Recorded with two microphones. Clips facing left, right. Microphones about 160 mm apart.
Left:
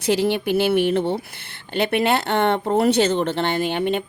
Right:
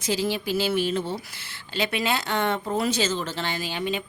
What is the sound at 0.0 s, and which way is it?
A woman's voice, 65° left (ahead or behind).